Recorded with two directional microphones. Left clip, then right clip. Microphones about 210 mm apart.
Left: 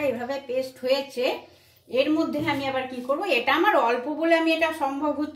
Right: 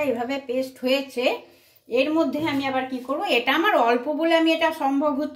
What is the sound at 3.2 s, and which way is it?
A woman's voice, 45° right (ahead or behind).